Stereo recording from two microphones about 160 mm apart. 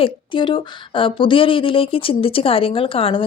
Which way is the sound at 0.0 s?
30° left (ahead or behind).